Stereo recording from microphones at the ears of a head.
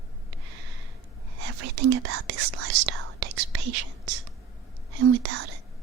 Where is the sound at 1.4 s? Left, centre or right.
Right.